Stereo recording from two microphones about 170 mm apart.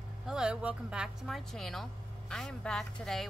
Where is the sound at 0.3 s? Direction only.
5° right (ahead or behind).